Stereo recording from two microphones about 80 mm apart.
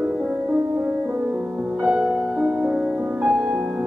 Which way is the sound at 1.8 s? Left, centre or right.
Centre.